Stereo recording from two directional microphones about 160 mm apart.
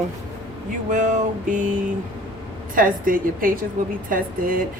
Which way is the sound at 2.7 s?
60° right (ahead or behind).